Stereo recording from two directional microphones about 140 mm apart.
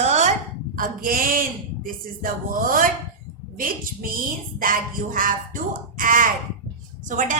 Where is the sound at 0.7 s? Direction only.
85° right.